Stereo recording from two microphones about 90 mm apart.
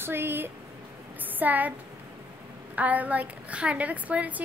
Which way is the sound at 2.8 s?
15° right (ahead or behind).